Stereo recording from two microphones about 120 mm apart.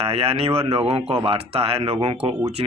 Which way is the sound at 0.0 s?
55° right (ahead or behind).